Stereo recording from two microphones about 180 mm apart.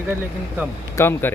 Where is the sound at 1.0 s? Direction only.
15° left (ahead or behind).